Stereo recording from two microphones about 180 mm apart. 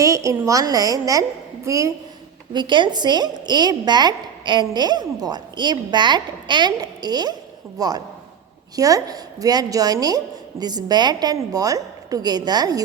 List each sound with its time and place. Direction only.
0.0 s a woman's voice: 15° right (ahead or behind)